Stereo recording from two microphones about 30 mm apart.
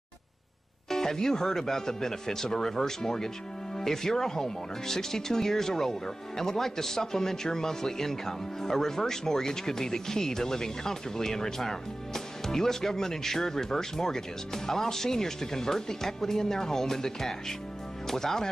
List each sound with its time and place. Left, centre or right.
0.8 s speech: centre